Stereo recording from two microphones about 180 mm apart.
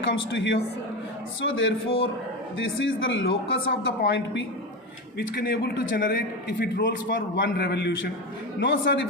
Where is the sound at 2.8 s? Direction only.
90° left.